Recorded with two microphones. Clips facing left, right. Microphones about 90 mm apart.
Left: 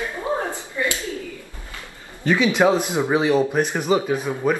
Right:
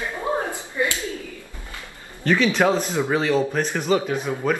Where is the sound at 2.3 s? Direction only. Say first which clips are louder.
Left 1 dB; 15° left (ahead or behind).